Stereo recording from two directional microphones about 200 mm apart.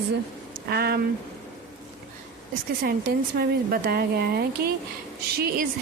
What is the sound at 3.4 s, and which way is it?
A woman's voice, 50° right (ahead or behind).